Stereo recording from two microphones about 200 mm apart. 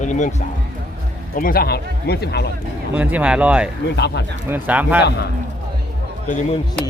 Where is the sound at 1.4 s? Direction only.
45° left (ahead or behind).